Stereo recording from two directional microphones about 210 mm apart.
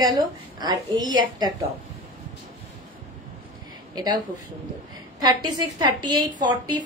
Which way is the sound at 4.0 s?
20° right (ahead or behind).